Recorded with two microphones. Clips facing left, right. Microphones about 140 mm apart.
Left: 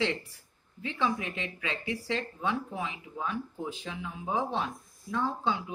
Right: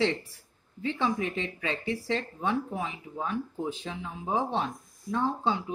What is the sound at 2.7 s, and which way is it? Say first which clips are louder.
Speech: right 2 dB; 40° right (ahead or behind).